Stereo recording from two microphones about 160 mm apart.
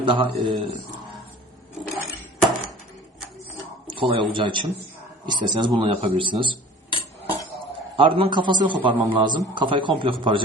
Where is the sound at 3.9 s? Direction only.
30° right (ahead or behind).